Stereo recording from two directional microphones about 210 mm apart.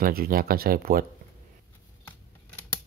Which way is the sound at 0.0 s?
45° right (ahead or behind).